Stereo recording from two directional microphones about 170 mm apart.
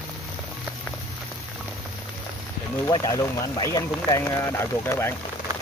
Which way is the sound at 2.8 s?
20° left (ahead or behind).